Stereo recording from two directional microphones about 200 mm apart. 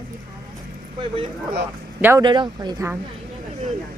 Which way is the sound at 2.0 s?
15° right (ahead or behind).